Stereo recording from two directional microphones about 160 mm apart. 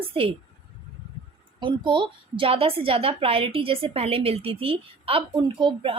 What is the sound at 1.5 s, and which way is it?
A woman's voice, 30° right (ahead or behind).